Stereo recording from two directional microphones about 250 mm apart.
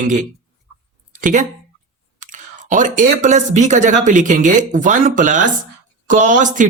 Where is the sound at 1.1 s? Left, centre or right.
Right.